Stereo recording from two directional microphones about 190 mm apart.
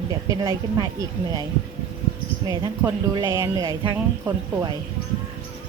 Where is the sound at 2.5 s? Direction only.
20° right (ahead or behind).